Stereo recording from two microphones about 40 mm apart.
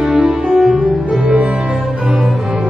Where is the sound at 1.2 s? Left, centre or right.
Right.